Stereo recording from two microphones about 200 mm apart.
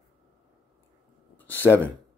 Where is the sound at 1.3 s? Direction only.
10° left (ahead or behind).